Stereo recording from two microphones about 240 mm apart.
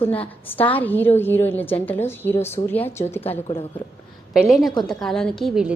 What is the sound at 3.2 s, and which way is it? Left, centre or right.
Speech, left.